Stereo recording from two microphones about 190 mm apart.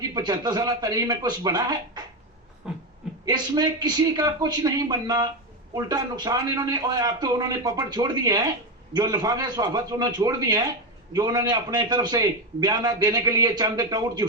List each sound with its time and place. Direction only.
0.0 s a man's voice: 20° right (ahead or behind)
2.6 s a sound: 5° right (ahead or behind)
3.2 s a man's voice: 20° right (ahead or behind)